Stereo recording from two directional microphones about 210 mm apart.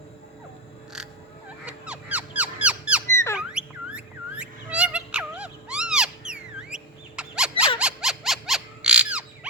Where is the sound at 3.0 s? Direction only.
10° left (ahead or behind).